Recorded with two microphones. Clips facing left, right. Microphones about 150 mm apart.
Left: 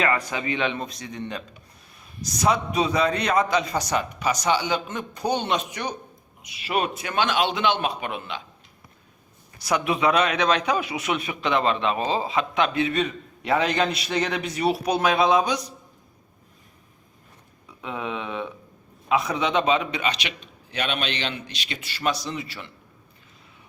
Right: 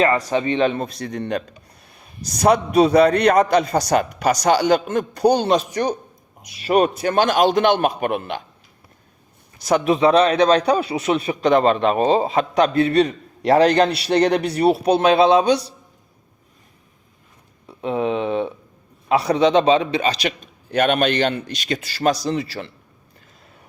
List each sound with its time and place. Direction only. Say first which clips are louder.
0.0 s a man's voice: right 7 dB; 35° right (ahead or behind)
0.9 s a man's voice: right 8 dB; 60° right (ahead or behind)
3.7 s a man's voice: right 7 dB; 40° right (ahead or behind)
4.2 s a man's voice: right 6 dB; 75° right (ahead or behind)
4.4 s a man's voice: right 7 dB; 40° right (ahead or behind)
4.7 s a man's voice: right 9 dB; 70° right (ahead or behind)
5.3 s a man's voice: right 3 dB; 35° right (ahead or behind)
9.6 s a man's voice: right 6 dB; 40° right (ahead or behind)
13.8 s a man's voice: right 8 dB; 70° right (ahead or behind)
14.8 s a man's voice: right 6 dB; 30° right (ahead or behind)
17.7 s a man's voice: right 10 dB; 35° right (ahead or behind)